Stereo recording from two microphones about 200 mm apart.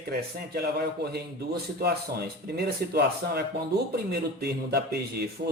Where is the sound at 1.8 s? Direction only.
50° right (ahead or behind).